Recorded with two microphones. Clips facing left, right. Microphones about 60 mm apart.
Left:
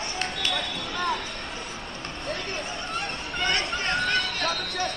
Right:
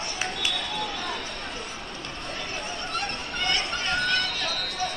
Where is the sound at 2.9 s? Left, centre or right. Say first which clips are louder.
Even; centre.